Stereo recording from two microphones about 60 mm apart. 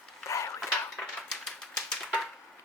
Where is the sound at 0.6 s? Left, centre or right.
Centre.